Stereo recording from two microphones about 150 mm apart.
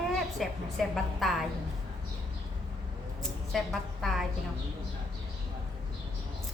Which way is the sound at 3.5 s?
Centre (ahead or behind).